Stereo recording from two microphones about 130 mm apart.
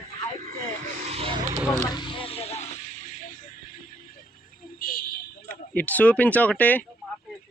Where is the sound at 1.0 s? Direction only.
50° right (ahead or behind).